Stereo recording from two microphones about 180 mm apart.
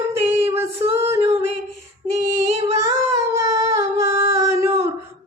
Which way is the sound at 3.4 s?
15° right (ahead or behind).